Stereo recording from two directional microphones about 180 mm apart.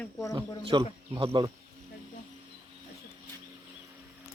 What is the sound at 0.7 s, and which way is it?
Speech, 25° right (ahead or behind).